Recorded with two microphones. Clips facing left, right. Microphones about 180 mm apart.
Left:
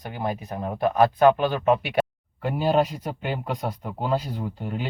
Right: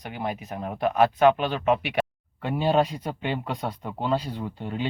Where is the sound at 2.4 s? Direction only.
Centre (ahead or behind).